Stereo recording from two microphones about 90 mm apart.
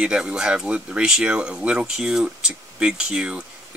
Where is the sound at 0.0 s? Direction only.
10° right (ahead or behind).